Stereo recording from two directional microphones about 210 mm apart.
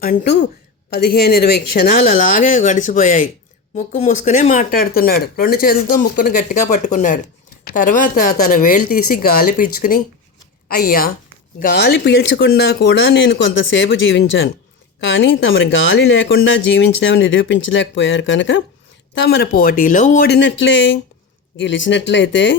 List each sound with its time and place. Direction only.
0.0 s speech: 40° left (ahead or behind); by 22.5 s 60° left (ahead or behind)